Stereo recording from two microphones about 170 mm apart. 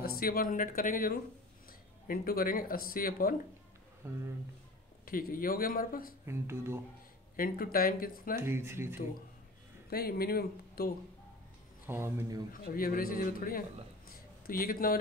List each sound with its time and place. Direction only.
0.0 s speech: 60° left (ahead or behind)
4.0 s speech: 15° right (ahead or behind)
5.0 s speech: 55° left (ahead or behind)
6.2 s speech: 15° right (ahead or behind)
7.3 s speech: 60° left (ahead or behind)
8.4 s speech: 15° right (ahead or behind)
9.8 s speech: 65° left (ahead or behind)
11.8 s speech: 15° right (ahead or behind)
12.6 s a man's voice: 55° left (ahead or behind)